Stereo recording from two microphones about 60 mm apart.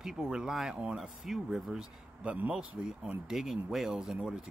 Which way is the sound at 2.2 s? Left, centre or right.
Right.